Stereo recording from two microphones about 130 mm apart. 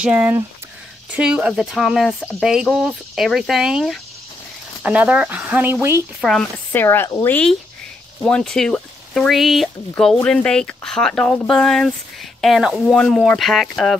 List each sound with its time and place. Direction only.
0.0 s speech: 15° right (ahead or behind)
6.7 s speech: 15° left (ahead or behind)
8.2 s speech: 5° left (ahead or behind)